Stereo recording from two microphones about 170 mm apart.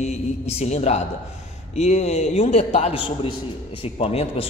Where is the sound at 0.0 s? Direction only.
40° left (ahead or behind).